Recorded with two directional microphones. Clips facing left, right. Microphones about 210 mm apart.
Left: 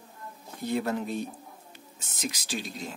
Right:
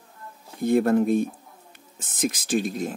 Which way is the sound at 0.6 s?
50° right (ahead or behind).